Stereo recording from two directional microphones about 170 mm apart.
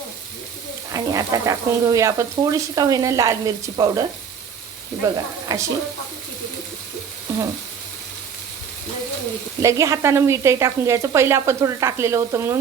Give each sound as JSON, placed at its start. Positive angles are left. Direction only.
{"t": 0.9, "sound": "speech", "side_deg": -20}
{"t": 5.1, "sound": "speech", "side_deg": -20}
{"t": 7.3, "sound": "frying", "side_deg": -15}
{"t": 9.6, "sound": "speech", "side_deg": -20}